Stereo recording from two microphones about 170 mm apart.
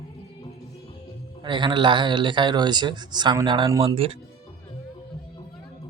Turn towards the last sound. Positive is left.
turn(degrees=-25)  # may be behind; listen again after turning